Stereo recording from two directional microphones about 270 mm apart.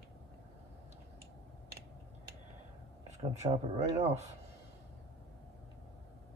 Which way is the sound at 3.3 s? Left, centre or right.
Right.